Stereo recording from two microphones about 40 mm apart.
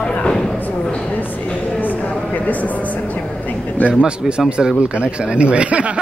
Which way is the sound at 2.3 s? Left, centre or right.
Left.